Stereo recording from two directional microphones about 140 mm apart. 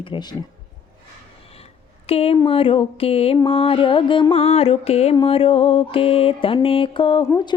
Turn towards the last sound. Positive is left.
turn(degrees=30)  # may be behind; listen again after turning